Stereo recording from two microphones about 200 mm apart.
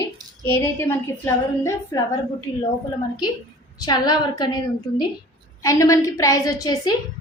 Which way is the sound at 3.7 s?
20° left (ahead or behind).